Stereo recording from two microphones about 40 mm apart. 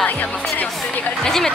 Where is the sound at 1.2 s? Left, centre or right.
Centre.